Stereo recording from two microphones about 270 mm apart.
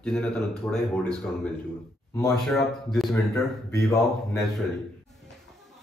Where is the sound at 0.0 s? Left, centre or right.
Centre.